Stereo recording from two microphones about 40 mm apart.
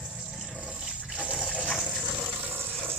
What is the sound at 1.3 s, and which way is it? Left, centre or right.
Water, centre.